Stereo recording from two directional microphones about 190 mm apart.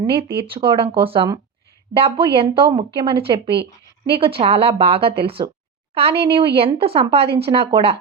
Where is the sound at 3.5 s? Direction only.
60° right (ahead or behind).